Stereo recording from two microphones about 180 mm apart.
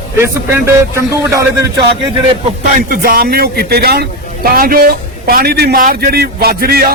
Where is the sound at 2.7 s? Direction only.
50° right (ahead or behind).